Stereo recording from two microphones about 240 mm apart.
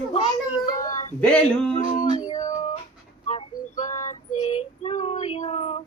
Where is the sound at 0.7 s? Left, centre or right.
Left.